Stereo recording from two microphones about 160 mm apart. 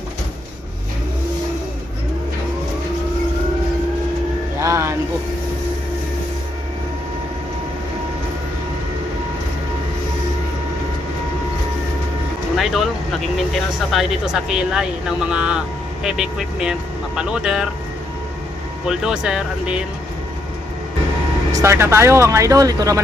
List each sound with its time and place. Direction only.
4.6 s music: 20° right (ahead or behind)
12.5 s vehicle: centre (ahead or behind)
13.5 s speech: centre (ahead or behind)
18.9 s speech: 5° right (ahead or behind)
21.5 s speech: 15° right (ahead or behind)